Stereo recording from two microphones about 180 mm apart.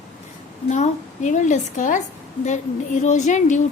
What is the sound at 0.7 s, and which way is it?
A woman's voice, 40° left (ahead or behind).